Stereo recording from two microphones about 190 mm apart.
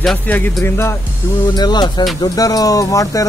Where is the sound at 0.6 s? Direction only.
15° left (ahead or behind).